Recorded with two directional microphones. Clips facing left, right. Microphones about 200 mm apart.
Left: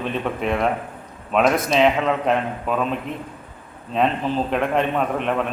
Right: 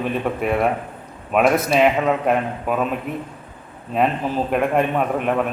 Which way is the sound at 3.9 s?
5° right (ahead or behind).